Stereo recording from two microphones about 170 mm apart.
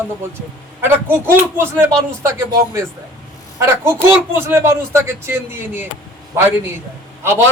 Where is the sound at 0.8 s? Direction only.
15° right (ahead or behind).